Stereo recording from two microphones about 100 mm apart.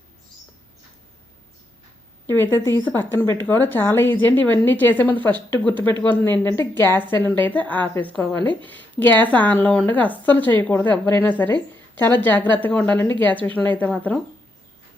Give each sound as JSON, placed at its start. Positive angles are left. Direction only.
{"t": 2.2, "sound": "a woman's voice", "side_deg": 25}